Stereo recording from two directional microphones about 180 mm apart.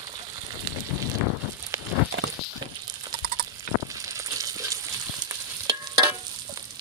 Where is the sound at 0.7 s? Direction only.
20° right (ahead or behind).